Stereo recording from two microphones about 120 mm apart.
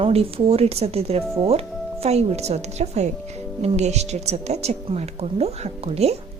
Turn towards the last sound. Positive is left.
turn(degrees=-60)  # may be behind; listen again after turning